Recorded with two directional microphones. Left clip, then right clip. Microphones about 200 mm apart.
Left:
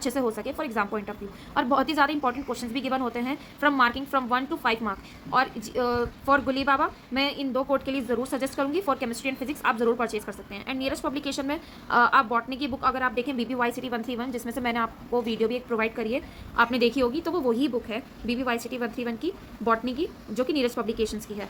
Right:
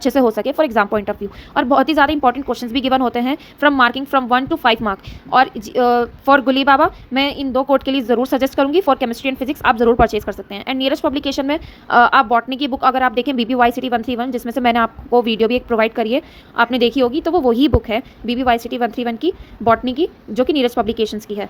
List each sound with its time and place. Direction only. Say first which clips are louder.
0.0 s a woman's voice: right 13 dB; 35° right (ahead or behind)